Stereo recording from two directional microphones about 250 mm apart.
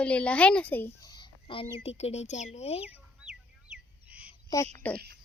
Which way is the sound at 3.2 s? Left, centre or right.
Centre.